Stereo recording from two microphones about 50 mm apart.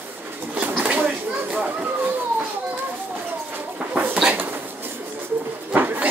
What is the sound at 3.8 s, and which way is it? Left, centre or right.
Bird, right.